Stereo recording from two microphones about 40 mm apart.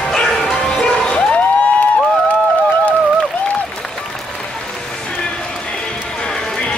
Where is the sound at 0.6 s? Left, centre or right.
Left.